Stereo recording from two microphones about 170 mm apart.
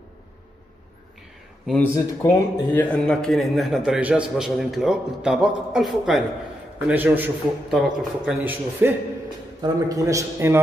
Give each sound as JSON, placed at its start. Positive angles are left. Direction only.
{"t": 1.8, "sound": "a man's voice", "side_deg": 15}